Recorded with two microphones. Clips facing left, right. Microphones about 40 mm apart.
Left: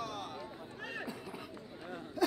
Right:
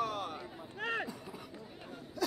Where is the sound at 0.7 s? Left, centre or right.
Right.